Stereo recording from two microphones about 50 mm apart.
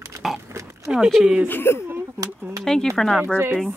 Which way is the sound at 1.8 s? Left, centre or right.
Right.